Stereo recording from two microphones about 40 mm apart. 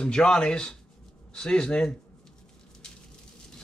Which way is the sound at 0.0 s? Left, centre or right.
Left.